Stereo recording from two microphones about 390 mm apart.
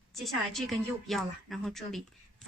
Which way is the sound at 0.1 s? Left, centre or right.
Centre.